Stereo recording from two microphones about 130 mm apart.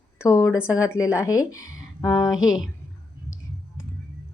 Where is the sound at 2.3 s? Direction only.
5° right (ahead or behind).